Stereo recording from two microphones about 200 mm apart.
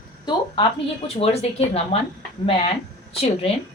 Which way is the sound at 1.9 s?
30° left (ahead or behind).